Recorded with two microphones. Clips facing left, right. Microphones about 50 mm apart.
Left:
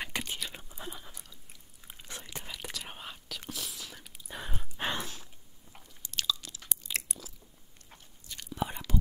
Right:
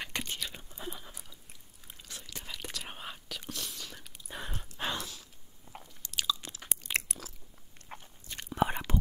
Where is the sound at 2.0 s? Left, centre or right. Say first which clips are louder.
Left 3 dB; left.